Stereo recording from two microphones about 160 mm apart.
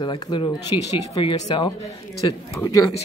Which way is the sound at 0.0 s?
25° left (ahead or behind).